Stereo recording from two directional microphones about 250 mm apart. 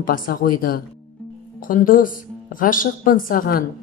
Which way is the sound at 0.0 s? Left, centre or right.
Left.